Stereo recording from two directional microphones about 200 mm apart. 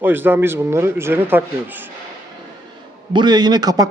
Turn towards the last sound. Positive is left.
turn(degrees=-20)  # may be behind; listen again after turning